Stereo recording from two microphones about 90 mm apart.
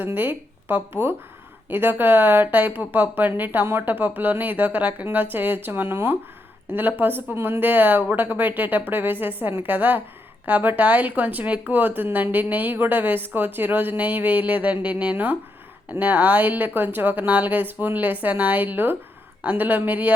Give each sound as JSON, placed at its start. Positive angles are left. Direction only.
{"t": 0.0, "sound": "speech", "side_deg": -20}